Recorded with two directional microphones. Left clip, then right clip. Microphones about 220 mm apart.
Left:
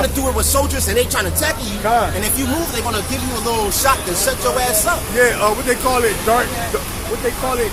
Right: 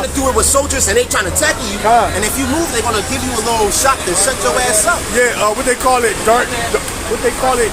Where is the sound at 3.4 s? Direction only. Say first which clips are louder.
Right 3 dB; 20° left (ahead or behind).